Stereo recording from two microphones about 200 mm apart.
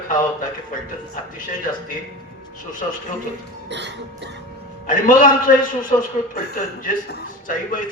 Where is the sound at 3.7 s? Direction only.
60° right (ahead or behind).